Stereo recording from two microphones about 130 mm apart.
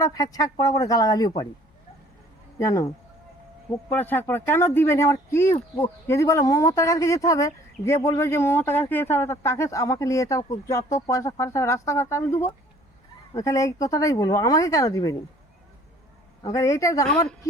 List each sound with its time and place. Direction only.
0.0 s speech: 30° left (ahead or behind)
2.6 s speech: 25° left (ahead or behind)
16.4 s speech: 25° left (ahead or behind)